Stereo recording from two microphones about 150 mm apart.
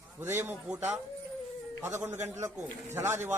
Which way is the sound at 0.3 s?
15° right (ahead or behind).